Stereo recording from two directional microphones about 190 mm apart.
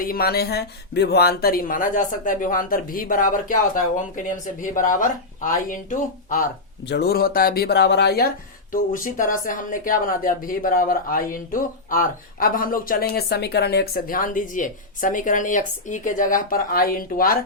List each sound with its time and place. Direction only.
0.0 s speech: 50° left (ahead or behind)
6.8 s speech: 60° left (ahead or behind)
8.7 s speech: 45° left (ahead or behind)